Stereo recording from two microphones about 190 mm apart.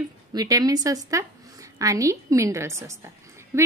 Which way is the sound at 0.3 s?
20° right (ahead or behind).